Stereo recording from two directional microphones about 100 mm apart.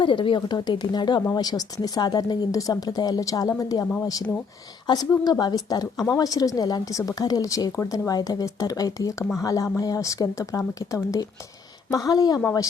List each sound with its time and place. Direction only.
0.0 s a woman's voice: 55° left (ahead or behind); by 12.4 s 40° left (ahead or behind)